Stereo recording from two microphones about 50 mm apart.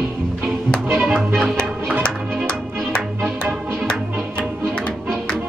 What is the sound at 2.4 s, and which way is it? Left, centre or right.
Music, centre.